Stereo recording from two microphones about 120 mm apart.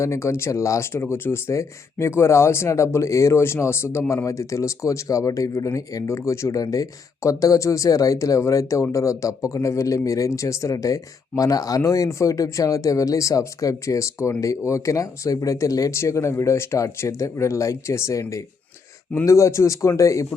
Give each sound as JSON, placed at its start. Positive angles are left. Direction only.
{"t": 0.0, "sound": "speech", "side_deg": 25}